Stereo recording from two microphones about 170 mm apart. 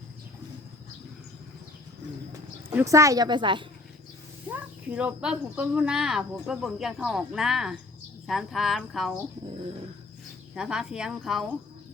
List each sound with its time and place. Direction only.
2.7 s a woman's voice: 20° right (ahead or behind)
4.5 s speech: 10° right (ahead or behind)
10.5 s speech: 5° right (ahead or behind)